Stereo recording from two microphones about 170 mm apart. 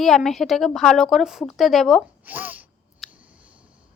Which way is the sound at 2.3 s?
10° right (ahead or behind).